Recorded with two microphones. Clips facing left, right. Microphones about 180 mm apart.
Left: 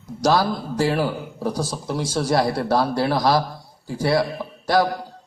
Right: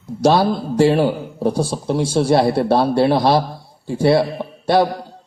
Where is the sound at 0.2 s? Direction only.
25° right (ahead or behind).